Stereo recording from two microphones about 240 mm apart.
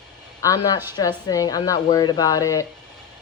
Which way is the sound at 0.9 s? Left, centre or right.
Centre.